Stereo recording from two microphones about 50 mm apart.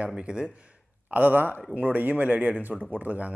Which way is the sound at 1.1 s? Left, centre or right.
Right.